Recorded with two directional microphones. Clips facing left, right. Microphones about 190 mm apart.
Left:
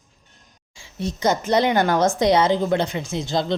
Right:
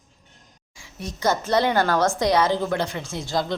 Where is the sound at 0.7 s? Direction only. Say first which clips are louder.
Left 7 dB; 25° left (ahead or behind).